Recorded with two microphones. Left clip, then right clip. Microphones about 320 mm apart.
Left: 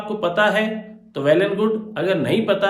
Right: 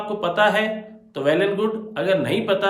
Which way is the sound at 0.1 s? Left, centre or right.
Centre.